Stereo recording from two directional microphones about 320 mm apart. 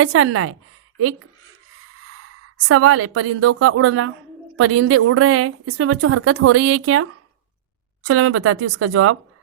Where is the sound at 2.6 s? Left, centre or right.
Right.